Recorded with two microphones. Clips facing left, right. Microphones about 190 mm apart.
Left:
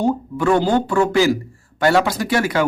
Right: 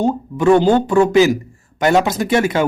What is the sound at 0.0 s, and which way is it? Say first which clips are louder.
A man's voice: right 3 dB; 20° right (ahead or behind).